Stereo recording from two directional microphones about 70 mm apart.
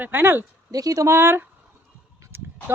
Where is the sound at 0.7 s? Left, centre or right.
Right.